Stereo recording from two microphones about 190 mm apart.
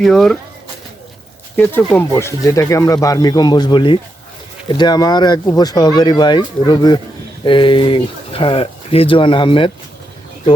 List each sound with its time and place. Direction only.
0.0 s speech: centre (ahead or behind)
1.5 s speech: 10° left (ahead or behind); by 9.7 s 25° left (ahead or behind)